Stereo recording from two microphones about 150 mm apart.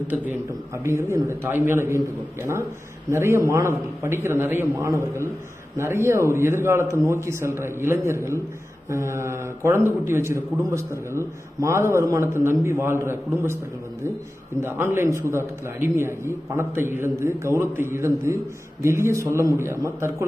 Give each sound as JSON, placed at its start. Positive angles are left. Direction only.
{"t": 0.8, "sound": "a man's voice", "side_deg": -15}
{"t": 14.6, "sound": "a man's voice", "side_deg": -15}